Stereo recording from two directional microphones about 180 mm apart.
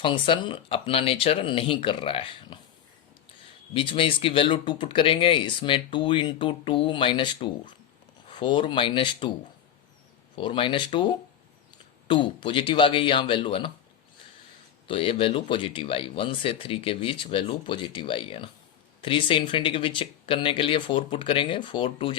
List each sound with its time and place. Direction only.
0.0 s speech: 25° left (ahead or behind)
3.8 s speech: 30° left (ahead or behind)
10.3 s speech: 30° left (ahead or behind)
14.8 s speech: 30° left (ahead or behind)